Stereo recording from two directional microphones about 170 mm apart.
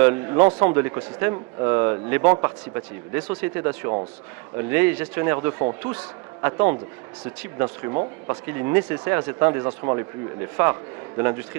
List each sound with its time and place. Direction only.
0.0 s a man's voice: 15° right (ahead or behind)